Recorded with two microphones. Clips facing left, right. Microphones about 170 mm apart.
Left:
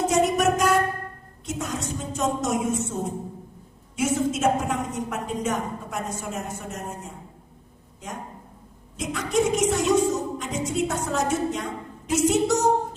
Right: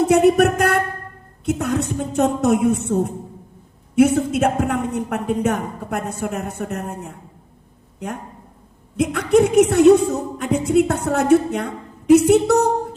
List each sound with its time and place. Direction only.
0.1 s a woman's voice: 60° right (ahead or behind)